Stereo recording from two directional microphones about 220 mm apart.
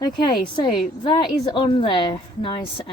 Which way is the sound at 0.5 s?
20° left (ahead or behind).